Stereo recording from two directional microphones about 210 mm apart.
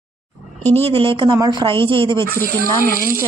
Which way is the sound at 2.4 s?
45° right (ahead or behind).